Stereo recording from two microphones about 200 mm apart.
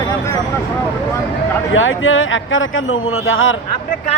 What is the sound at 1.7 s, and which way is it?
A man's voice, 80° left.